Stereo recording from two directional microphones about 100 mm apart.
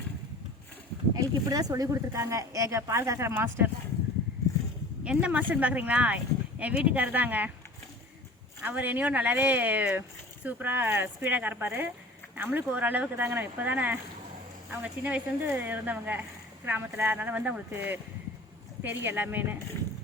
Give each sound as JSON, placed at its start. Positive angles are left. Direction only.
{"t": 1.1, "sound": "speech", "side_deg": -40}
{"t": 5.0, "sound": "speech", "side_deg": -15}
{"t": 8.6, "sound": "speech", "side_deg": -15}